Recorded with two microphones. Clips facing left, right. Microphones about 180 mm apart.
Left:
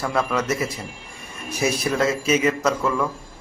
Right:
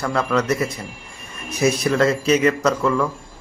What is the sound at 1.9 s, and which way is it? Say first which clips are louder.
Speech: right 3 dB; centre (ahead or behind).